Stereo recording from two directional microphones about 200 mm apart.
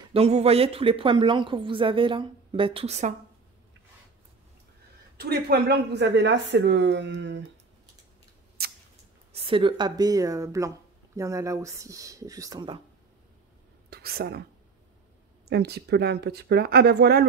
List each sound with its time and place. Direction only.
0.1 s a woman's voice: 30° right (ahead or behind)
5.1 s speech: 50° right (ahead or behind)
9.3 s a woman's voice: 25° right (ahead or behind)
13.8 s speech: 50° right (ahead or behind)
15.5 s speech: 55° right (ahead or behind)